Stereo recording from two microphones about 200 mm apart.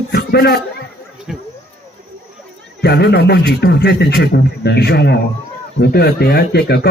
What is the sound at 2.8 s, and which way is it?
A man's voice, 55° left (ahead or behind).